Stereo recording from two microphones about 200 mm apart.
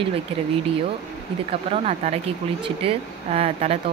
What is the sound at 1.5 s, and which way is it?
Speech, 30° right (ahead or behind).